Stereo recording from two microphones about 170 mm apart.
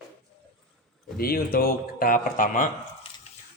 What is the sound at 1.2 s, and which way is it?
A man's voice, 60° left (ahead or behind).